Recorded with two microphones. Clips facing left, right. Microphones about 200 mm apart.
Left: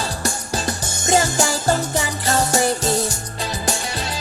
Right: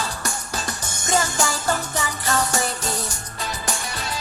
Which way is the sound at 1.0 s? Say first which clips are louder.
Left 4 dB; 25° left (ahead or behind).